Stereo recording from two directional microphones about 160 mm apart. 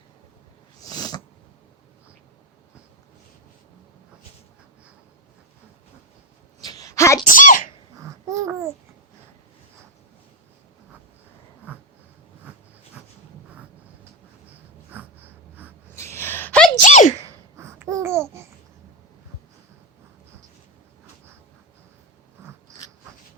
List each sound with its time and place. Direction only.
0.8 s a sound: 25° left (ahead or behind)
6.7 s a sound: 20° left (ahead or behind)
7.3 s speech: 55° left (ahead or behind)
8.3 s babbling: 20° right (ahead or behind)
14.9 s snort: 10° right (ahead or behind)
16.0 s a sound: 15° left (ahead or behind)
16.8 s sneeze: 50° left (ahead or behind)
17.6 s babbling: 15° right (ahead or behind)
22.4 s biting: 15° right (ahead or behind)